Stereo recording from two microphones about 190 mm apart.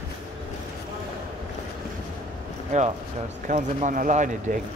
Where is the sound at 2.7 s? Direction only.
40° right (ahead or behind).